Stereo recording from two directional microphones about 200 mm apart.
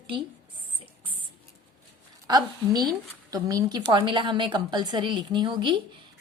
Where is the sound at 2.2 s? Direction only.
20° right (ahead or behind).